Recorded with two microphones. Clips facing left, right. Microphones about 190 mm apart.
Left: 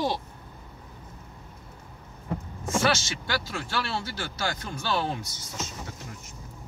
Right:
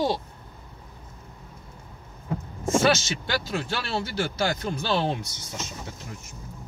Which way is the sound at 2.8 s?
20° right (ahead or behind).